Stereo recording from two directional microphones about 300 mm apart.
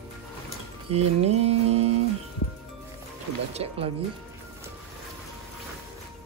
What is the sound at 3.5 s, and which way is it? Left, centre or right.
Mantra, centre.